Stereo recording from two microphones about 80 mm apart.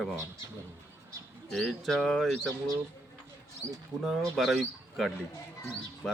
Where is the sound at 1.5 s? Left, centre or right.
Centre.